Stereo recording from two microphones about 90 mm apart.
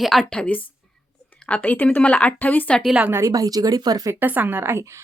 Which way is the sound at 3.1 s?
35° right (ahead or behind).